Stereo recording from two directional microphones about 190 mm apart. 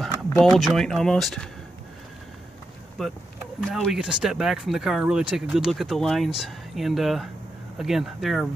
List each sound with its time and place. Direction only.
0.3 s speech: 5° left (ahead or behind)
3.0 s speech: centre (ahead or behind)